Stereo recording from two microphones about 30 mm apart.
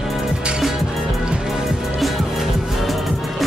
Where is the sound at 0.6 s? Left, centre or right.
Centre.